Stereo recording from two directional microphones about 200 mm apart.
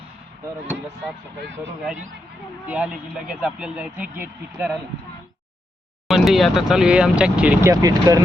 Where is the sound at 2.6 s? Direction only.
5° right (ahead or behind).